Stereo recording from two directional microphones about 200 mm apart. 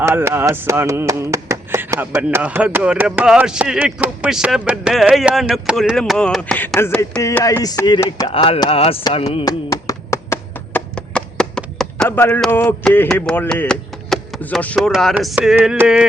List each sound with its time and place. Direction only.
0.0 s speech: 10° right (ahead or behind); by 9.5 s 30° left (ahead or behind)
9.5 s finger snapping: 15° left (ahead or behind)
10.8 s speech: 5° left (ahead or behind)